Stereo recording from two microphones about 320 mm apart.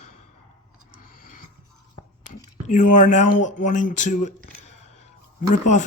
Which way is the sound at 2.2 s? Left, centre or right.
Left.